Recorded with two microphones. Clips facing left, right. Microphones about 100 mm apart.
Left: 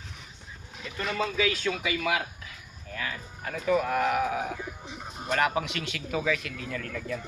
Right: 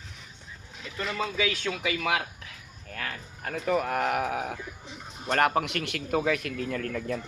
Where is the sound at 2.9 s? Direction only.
55° right (ahead or behind).